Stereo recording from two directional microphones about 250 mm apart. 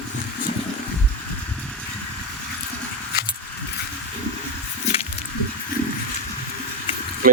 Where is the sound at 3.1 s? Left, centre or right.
Left.